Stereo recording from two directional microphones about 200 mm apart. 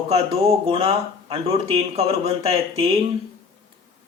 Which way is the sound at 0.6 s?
30° right (ahead or behind).